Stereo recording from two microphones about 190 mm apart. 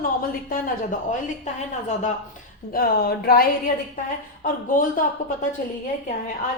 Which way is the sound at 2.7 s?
50° left (ahead or behind).